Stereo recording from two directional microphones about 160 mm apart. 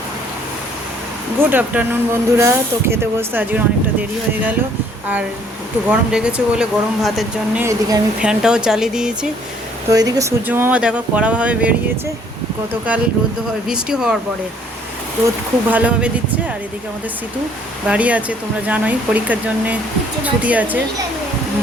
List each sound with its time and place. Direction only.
1.4 s speech: 10° right (ahead or behind)
5.9 s speech: 5° right (ahead or behind)
7.6 s speech: 20° right (ahead or behind)
8.2 s speech: 5° right (ahead or behind)
9.9 s speech: 20° right (ahead or behind)
13.7 s speech: 5° right (ahead or behind)
15.7 s speech: 5° right (ahead or behind)
17.8 s speech: 10° right (ahead or behind)